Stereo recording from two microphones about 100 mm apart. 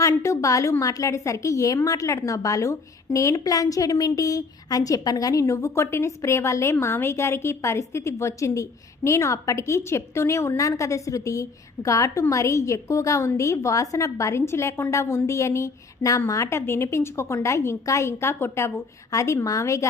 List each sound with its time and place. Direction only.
0.0 s a woman's voice: 30° left (ahead or behind)